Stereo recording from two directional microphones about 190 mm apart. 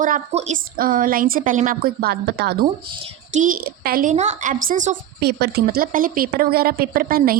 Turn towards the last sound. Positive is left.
turn(degrees=-50)  # may be behind; listen again after turning